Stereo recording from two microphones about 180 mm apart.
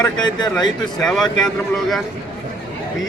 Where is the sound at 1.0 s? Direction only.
5° left (ahead or behind).